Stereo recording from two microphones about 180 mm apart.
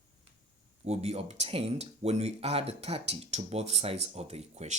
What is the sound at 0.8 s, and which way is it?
Speech, 35° right (ahead or behind).